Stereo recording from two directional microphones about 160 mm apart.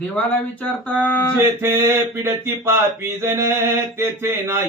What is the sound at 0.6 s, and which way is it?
Speech, 10° left (ahead or behind).